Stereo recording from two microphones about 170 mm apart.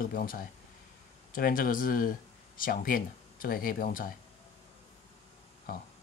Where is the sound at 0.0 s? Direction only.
55° left (ahead or behind).